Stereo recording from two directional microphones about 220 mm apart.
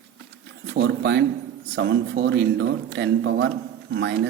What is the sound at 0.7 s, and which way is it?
Speech, 50° right (ahead or behind).